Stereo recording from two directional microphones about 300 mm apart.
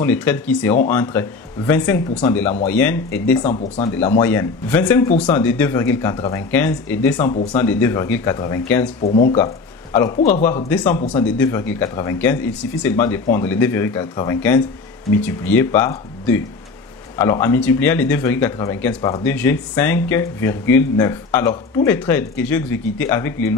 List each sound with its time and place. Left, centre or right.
0.0 s speech: centre
3.4 s speech: centre
3.9 s speech: centre
9.0 s speech: left
10.4 s a man's voice: centre
19.2 s speech: centre